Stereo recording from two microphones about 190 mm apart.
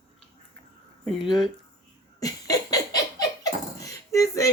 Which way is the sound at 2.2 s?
20° left (ahead or behind).